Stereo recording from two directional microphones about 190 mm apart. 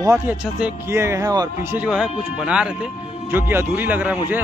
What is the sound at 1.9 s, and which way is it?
Speech, 5° right (ahead or behind).